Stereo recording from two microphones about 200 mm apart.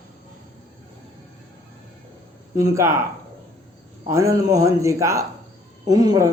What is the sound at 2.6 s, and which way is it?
Speech, 15° right (ahead or behind).